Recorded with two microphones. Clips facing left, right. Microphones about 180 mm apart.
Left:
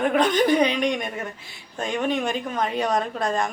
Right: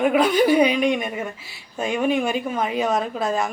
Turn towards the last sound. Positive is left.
turn(degrees=-5)  # may be behind; listen again after turning